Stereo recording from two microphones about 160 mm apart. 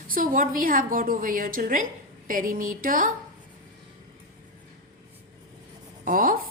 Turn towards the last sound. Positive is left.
turn(degrees=-60)  # may be behind; listen again after turning